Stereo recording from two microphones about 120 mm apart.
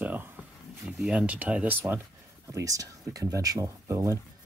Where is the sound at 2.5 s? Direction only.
30° right (ahead or behind).